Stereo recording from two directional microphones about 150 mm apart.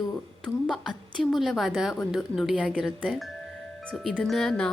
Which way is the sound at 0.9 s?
Centre (ahead or behind).